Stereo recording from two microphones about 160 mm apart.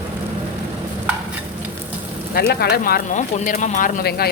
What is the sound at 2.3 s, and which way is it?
Speech, 75° left (ahead or behind).